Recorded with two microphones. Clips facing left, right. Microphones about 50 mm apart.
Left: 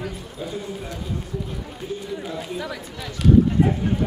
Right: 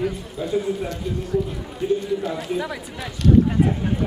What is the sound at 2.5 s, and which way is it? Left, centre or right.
Speech, centre.